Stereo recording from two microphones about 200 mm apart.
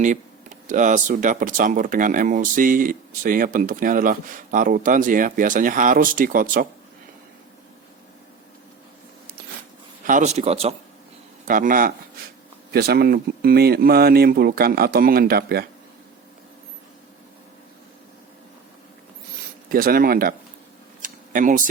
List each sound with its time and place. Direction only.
0.7 s speech: 40° right (ahead or behind)
10.1 s speech: 35° right (ahead or behind)
11.4 s speech: 40° right (ahead or behind)
19.6 s speech: 45° right (ahead or behind)
21.0 s a sound: 40° right (ahead or behind)